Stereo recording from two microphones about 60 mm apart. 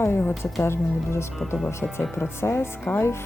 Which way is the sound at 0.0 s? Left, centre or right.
Left.